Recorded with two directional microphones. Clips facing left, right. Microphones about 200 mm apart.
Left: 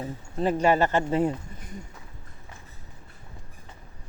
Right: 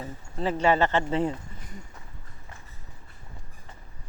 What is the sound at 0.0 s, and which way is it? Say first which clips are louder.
Speech: left 3 dB; 15° left (ahead or behind).